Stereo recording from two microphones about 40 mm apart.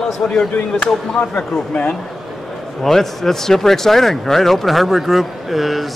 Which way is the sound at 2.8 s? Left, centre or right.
Centre.